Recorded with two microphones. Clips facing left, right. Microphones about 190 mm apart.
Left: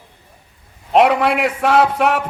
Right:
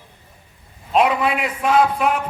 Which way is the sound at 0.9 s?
75° left (ahead or behind).